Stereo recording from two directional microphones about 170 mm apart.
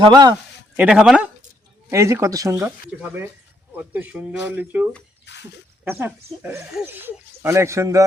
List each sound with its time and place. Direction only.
0.0 s speech: 25° right (ahead or behind)
0.8 s speech: 5° right (ahead or behind)
1.9 s speech: 15° right (ahead or behind)
5.2 s a sound: 90° left
5.8 s speech: 15° right (ahead or behind)